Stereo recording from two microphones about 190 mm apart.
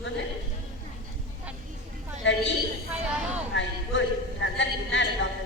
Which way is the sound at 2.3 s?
70° left (ahead or behind).